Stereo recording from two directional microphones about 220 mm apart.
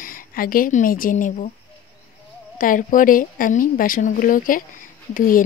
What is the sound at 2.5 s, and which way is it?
Speech, 40° left (ahead or behind).